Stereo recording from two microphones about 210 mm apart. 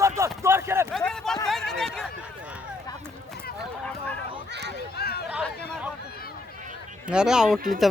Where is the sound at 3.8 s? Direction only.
5° left (ahead or behind).